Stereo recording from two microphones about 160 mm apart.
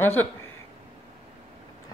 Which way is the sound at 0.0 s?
15° left (ahead or behind).